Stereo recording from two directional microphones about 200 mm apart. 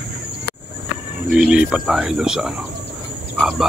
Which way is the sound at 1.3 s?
5° right (ahead or behind).